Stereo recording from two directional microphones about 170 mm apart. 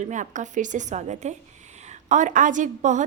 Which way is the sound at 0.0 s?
45° right (ahead or behind).